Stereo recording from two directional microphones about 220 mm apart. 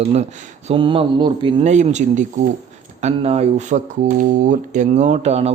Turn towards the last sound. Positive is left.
turn(degrees=-30)  # may be behind; listen again after turning